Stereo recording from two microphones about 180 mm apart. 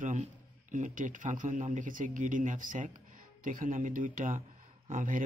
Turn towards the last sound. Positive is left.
turn(degrees=-45)  # may be behind; listen again after turning